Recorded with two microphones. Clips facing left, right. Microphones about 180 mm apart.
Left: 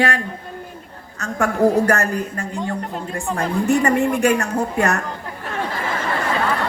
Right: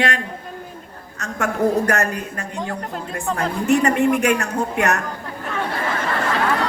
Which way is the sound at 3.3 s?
5° left (ahead or behind).